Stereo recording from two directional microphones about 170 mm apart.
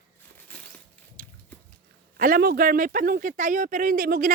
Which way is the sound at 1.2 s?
55° right (ahead or behind).